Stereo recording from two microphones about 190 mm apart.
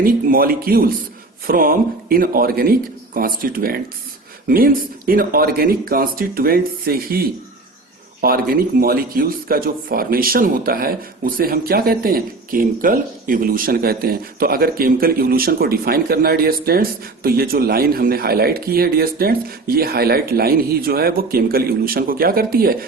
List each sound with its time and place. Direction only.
0.0 s speech: 50° right (ahead or behind)